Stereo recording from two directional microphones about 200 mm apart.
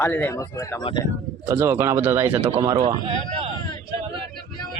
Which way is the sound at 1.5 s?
15° right (ahead or behind).